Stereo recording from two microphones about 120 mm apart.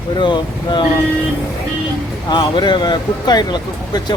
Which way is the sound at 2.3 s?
40° left (ahead or behind).